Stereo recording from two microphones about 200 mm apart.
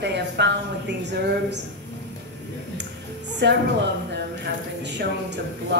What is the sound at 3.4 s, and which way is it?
Speech, 60° right (ahead or behind).